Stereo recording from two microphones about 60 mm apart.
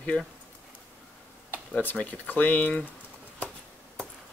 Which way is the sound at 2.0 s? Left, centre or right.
Left.